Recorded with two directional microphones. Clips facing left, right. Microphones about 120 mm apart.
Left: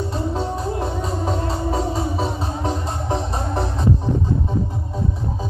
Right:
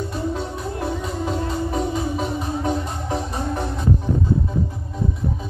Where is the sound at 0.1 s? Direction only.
30° left (ahead or behind).